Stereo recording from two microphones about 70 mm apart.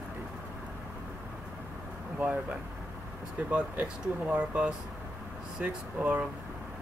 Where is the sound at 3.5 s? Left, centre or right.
Centre.